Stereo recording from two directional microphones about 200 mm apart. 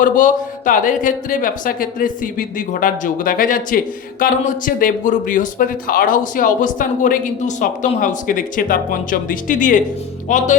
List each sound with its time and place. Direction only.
0.0 s a woman's voice: 40° left (ahead or behind)